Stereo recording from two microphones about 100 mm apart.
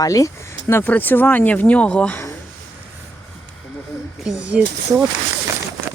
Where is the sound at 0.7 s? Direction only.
20° left (ahead or behind).